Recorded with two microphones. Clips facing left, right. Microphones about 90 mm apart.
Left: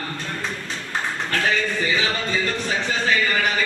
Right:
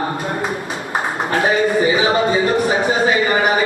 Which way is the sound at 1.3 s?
20° right (ahead or behind).